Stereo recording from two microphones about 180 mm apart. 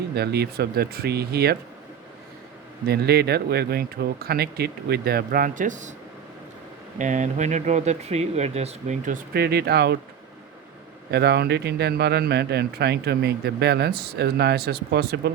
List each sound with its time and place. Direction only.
0.1 s speech: 65° right (ahead or behind)
2.8 s speech: 60° right (ahead or behind); by 5.9 s 45° right (ahead or behind)
7.0 s speech: 45° right (ahead or behind); by 10.0 s 65° right (ahead or behind)
11.1 s speech: 65° right (ahead or behind)